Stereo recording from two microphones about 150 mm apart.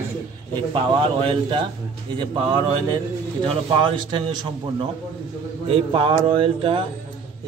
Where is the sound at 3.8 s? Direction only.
35° right (ahead or behind).